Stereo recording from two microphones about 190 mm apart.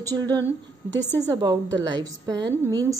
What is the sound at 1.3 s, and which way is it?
A woman's voice, 20° right (ahead or behind).